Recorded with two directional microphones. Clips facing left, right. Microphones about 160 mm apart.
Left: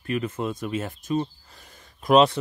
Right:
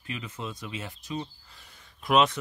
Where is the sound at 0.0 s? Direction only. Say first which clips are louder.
Left 10 dB; 55° left (ahead or behind).